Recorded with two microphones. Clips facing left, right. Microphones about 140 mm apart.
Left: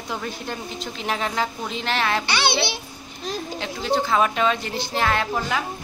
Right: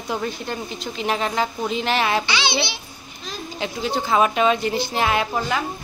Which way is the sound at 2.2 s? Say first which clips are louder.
Left 1 dB; 55° left (ahead or behind).